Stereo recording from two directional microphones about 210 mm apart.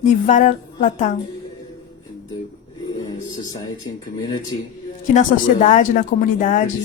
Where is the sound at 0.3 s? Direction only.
35° left (ahead or behind).